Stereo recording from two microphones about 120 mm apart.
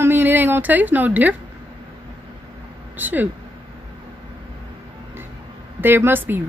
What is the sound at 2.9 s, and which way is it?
Speech, 15° right (ahead or behind).